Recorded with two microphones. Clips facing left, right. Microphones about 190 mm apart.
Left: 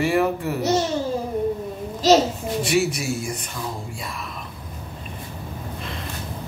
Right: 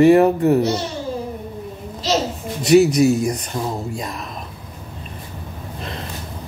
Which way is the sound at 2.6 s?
40° right (ahead or behind).